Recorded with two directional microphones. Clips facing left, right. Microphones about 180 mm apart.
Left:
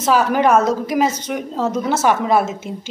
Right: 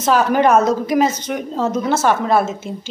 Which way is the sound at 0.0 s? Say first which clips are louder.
Right 1 dB; 5° left (ahead or behind).